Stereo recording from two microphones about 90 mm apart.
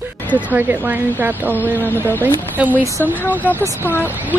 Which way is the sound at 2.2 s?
20° right (ahead or behind).